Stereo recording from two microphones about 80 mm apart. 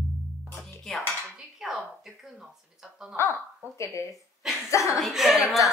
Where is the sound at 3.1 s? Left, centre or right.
Left.